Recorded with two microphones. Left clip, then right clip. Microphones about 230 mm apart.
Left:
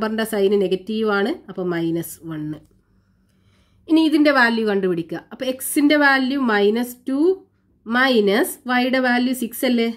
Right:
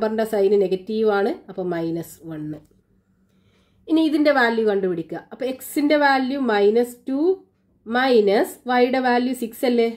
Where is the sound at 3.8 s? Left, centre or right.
Left.